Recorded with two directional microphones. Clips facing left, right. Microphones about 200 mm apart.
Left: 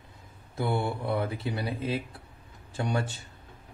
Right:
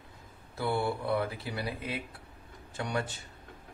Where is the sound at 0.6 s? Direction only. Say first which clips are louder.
Left 1 dB; 20° left (ahead or behind).